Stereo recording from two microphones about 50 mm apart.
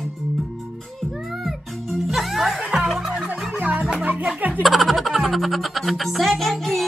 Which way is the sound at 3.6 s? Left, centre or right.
Right.